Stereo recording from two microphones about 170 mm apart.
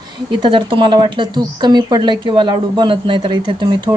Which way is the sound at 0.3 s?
25° right (ahead or behind).